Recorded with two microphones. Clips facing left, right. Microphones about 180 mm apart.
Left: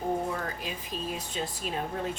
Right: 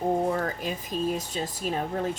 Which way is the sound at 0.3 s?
40° right (ahead or behind).